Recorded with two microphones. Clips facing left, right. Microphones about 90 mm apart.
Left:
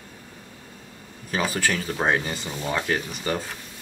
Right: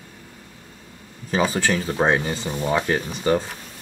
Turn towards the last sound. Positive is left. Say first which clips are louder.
# right 5 dB
turn(degrees=-25)  # may be behind; listen again after turning